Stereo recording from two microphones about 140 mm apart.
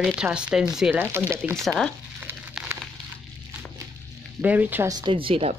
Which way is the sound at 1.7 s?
5° right (ahead or behind).